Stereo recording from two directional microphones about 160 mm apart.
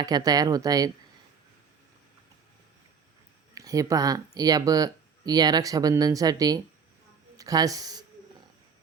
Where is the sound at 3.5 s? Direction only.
20° right (ahead or behind).